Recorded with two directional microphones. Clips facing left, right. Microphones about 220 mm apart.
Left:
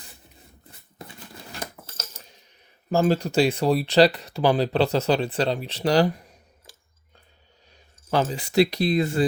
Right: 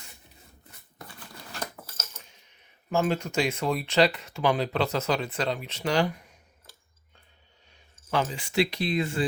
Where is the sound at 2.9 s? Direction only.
35° left (ahead or behind).